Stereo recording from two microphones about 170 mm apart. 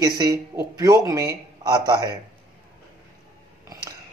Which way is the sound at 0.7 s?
20° right (ahead or behind).